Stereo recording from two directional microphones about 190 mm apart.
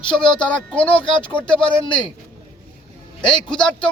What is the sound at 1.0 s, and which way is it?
Speech, 25° left (ahead or behind).